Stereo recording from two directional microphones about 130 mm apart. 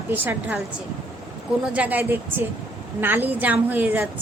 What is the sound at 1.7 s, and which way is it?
Speech, 10° right (ahead or behind).